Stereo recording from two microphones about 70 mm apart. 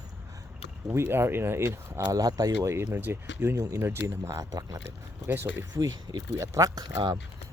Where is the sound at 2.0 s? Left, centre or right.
Right.